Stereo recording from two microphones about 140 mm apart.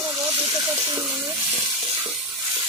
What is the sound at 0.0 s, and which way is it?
Hiss, 30° right (ahead or behind).